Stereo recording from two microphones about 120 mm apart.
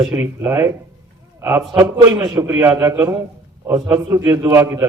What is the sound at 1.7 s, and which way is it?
A man's voice, 35° right (ahead or behind).